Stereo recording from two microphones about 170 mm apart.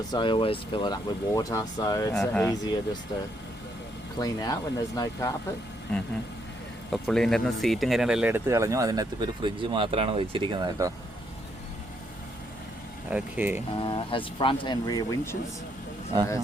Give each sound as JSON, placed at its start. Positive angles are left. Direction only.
{"t": 0.1, "sound": "speech", "side_deg": 30}
{"t": 2.1, "sound": "speech", "side_deg": 5}
{"t": 2.4, "sound": "speech", "side_deg": 20}
{"t": 4.2, "sound": "speech", "side_deg": 20}
{"t": 5.9, "sound": "speech", "side_deg": 5}
{"t": 8.4, "sound": "speech", "side_deg": -20}
{"t": 13.1, "sound": "speech", "side_deg": -10}
{"t": 13.7, "sound": "speech", "side_deg": 30}